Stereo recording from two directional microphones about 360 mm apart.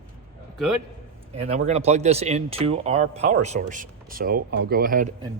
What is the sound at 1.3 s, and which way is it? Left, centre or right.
Speech, centre.